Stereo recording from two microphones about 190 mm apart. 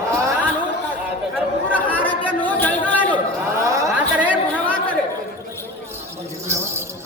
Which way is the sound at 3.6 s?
15° right (ahead or behind).